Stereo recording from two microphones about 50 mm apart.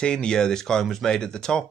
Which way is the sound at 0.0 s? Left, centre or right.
Centre.